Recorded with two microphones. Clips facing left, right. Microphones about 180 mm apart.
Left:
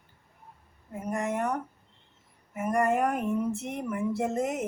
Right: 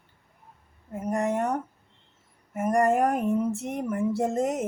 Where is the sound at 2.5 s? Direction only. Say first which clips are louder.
Right 3 dB; 45° right (ahead or behind).